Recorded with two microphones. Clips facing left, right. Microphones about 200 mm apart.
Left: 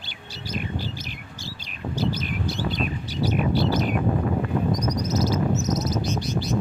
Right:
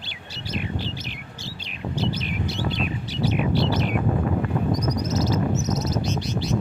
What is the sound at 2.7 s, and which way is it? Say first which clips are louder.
Bird: even; 40° left (ahead or behind).